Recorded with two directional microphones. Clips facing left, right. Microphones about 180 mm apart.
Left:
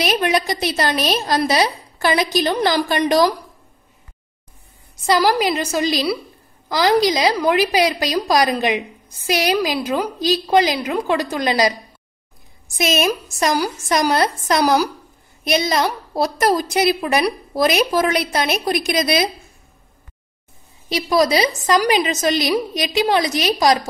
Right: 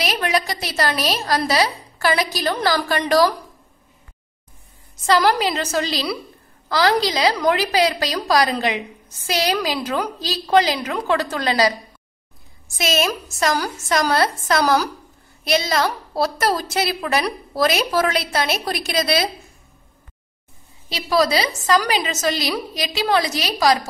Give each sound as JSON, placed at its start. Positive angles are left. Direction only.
{"t": 0.0, "sound": "a woman's voice", "side_deg": 20}
{"t": 5.0, "sound": "a woman's voice", "side_deg": 10}
{"t": 12.7, "sound": "a woman's voice", "side_deg": 20}
{"t": 20.9, "sound": "a woman's voice", "side_deg": 20}